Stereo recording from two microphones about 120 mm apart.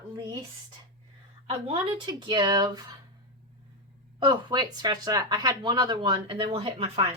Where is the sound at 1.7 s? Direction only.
45° right (ahead or behind).